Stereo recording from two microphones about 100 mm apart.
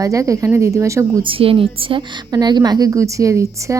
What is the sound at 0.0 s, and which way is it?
Speech, 35° right (ahead or behind).